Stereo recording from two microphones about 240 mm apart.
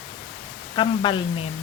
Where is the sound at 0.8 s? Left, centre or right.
Centre.